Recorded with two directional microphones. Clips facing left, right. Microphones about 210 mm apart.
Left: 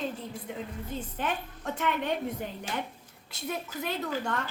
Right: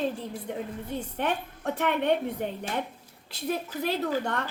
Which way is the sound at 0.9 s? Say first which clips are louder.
Right 4 dB; 65° right (ahead or behind).